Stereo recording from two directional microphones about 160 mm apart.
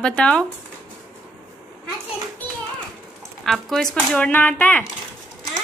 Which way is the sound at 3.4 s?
Centre (ahead or behind).